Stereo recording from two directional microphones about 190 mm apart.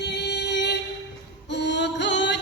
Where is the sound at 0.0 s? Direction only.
60° left (ahead or behind).